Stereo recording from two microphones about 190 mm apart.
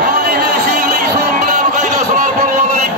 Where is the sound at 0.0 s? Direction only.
50° right (ahead or behind).